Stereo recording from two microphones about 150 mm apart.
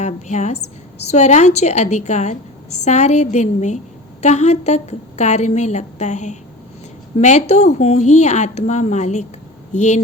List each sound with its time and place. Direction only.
0.0 s a woman's voice: 50° left (ahead or behind)